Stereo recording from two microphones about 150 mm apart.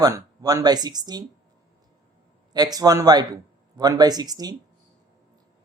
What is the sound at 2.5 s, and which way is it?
Speech, 25° right (ahead or behind).